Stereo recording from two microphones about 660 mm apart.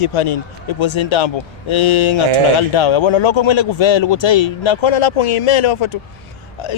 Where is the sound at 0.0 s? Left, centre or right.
Left.